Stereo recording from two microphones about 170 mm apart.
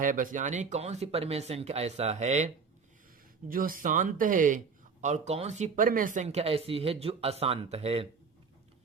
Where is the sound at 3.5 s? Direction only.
55° right (ahead or behind); by 8.0 s 35° right (ahead or behind).